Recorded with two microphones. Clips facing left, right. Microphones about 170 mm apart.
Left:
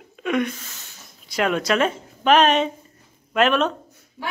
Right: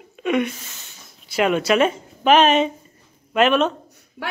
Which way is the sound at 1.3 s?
5° right (ahead or behind).